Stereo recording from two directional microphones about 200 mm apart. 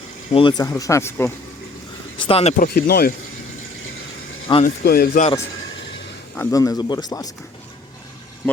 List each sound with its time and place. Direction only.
0.3 s speech: 20° left (ahead or behind)
2.1 s speech: 25° left (ahead or behind)
2.7 s speech: 50° left (ahead or behind)
4.6 s speech: 50° left (ahead or behind)
6.3 s speech: 15° left (ahead or behind)